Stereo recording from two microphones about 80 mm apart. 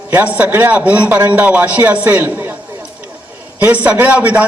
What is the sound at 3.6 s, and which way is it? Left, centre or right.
Speech, centre.